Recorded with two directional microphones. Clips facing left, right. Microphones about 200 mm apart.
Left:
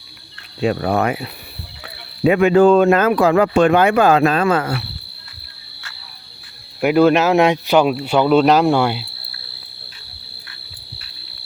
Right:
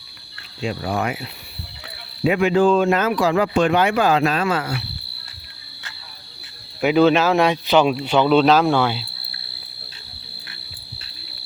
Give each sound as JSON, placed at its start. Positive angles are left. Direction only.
{"t": 0.6, "sound": "speech", "side_deg": 60}
{"t": 2.2, "sound": "speech", "side_deg": 45}
{"t": 6.8, "sound": "speech", "side_deg": 10}